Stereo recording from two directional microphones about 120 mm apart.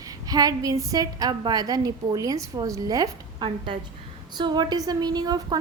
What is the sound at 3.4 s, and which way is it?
A woman's voice, 45° right (ahead or behind).